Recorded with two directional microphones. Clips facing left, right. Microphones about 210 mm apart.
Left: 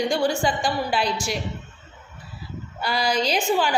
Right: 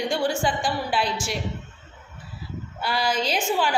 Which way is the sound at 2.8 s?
5° right (ahead or behind).